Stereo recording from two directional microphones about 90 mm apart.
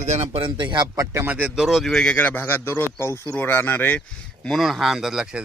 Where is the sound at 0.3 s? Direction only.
65° right (ahead or behind).